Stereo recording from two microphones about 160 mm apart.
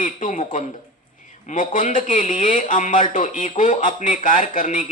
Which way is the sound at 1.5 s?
55° left (ahead or behind).